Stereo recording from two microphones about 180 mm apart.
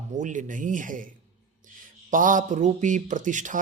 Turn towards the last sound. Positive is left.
turn(degrees=-45)  # may be behind; listen again after turning